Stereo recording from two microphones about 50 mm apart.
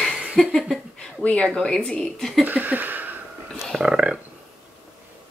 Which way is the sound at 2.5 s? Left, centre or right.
Right.